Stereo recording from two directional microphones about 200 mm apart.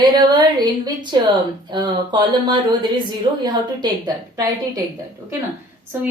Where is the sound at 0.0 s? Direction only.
20° right (ahead or behind).